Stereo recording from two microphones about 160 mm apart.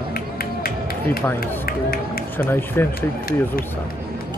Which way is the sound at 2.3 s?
15° left (ahead or behind).